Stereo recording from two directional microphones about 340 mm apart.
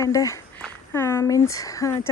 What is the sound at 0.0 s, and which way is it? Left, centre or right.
Speech, centre.